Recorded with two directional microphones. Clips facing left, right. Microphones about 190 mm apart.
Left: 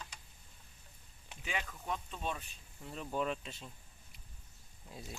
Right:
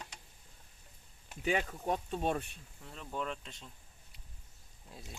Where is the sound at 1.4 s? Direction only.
40° right (ahead or behind); by 2.5 s 60° right (ahead or behind).